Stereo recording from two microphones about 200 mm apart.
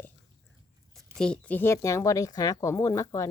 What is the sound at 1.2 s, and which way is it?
Speech, 5° left (ahead or behind).